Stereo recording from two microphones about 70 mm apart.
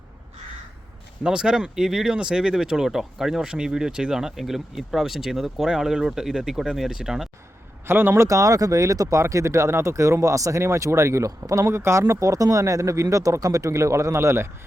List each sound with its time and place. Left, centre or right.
1.2 s speech: centre
7.9 s speech: right